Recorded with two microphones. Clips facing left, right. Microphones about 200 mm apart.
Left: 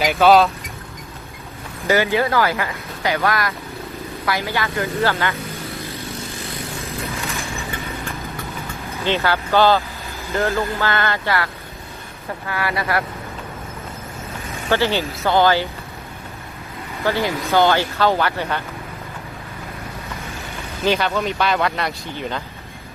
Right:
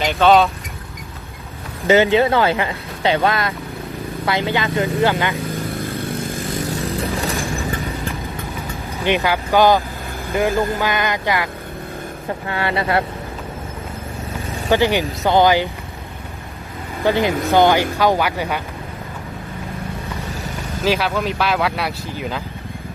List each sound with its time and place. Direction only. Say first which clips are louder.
0.0 s speech: even; 5° left (ahead or behind)
1.9 s speech: right 4 dB; 20° right (ahead or behind)
6.8 s vehicle: right 6 dB; 30° right (ahead or behind)
9.0 s speech: right 2 dB; 15° right (ahead or behind)
12.5 s speech: right 2 dB; 25° right (ahead or behind)
14.7 s speech: right 3 dB; 15° right (ahead or behind)
17.0 s speech: right 4 dB; 15° right (ahead or behind)
20.8 s speech: even; 5° right (ahead or behind)